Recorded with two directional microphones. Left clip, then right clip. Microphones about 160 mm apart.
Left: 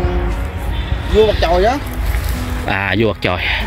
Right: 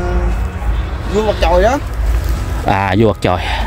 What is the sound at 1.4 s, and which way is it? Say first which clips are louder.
Speech: right 2 dB; 60° right (ahead or behind).